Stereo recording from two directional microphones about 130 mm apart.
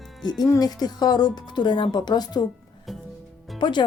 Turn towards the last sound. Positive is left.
turn(degrees=35)  # may be behind; listen again after turning